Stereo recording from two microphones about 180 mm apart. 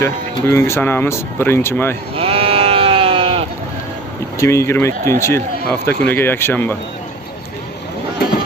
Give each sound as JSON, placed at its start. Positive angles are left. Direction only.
{"t": 0.0, "sound": "speech", "side_deg": 15}
{"t": 2.1, "sound": "sheep", "side_deg": -30}
{"t": 4.4, "sound": "speech", "side_deg": 15}